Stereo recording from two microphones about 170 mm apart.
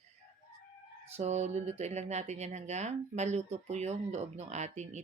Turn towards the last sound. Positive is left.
turn(degrees=-40)  # may be behind; listen again after turning